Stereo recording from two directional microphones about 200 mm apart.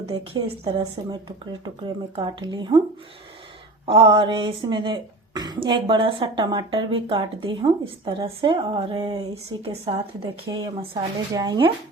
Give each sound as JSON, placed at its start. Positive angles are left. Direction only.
{"t": 0.0, "sound": "speech", "side_deg": -30}
{"t": 2.1, "sound": "speech", "side_deg": -25}
{"t": 3.8, "sound": "speech", "side_deg": -25}